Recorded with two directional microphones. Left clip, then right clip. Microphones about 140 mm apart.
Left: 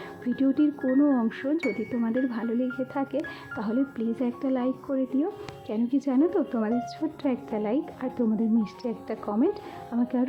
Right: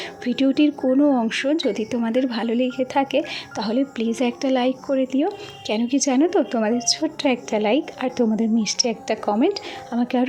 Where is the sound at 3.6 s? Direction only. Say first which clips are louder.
Right 6 dB; 15° right (ahead or behind).